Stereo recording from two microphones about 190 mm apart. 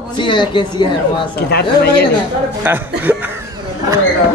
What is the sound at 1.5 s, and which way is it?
Speech, 60° left (ahead or behind).